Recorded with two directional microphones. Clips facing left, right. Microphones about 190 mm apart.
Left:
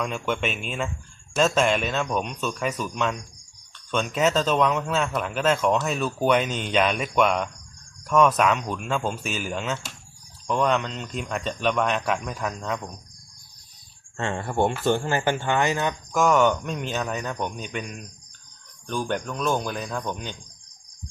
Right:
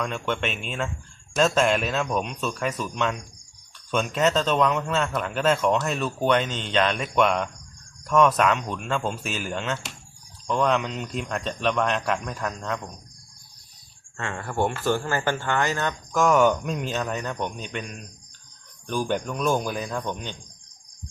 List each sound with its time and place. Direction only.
0.0 s speech: 5° left (ahead or behind)
14.2 s speech: 25° left (ahead or behind)
16.2 s speech: 5° right (ahead or behind)